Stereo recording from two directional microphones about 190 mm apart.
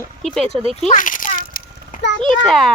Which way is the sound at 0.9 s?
45° left (ahead or behind).